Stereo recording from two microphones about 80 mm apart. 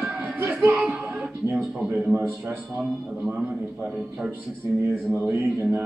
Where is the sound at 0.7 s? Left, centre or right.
Centre.